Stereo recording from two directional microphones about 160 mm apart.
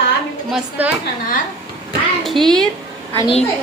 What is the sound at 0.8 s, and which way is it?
Speech, 10° right (ahead or behind).